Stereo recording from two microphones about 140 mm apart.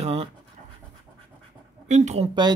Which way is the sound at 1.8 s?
55° right (ahead or behind).